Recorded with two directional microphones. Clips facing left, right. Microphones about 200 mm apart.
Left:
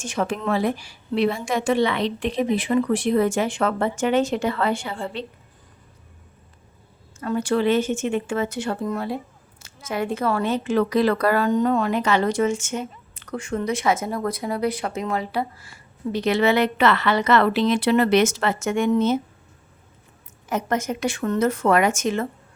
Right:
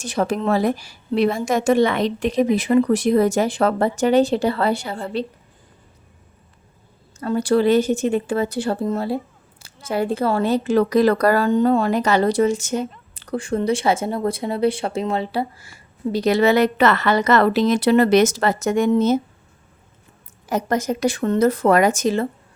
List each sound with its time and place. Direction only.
0.0 s a woman's voice: 35° right (ahead or behind)
7.2 s a woman's voice: 35° right (ahead or behind)
16.1 s a woman's voice: 40° right (ahead or behind)
20.5 s a woman's voice: 35° right (ahead or behind)